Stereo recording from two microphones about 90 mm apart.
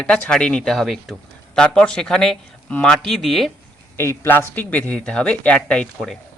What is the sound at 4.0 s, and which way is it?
Speech, 25° left (ahead or behind).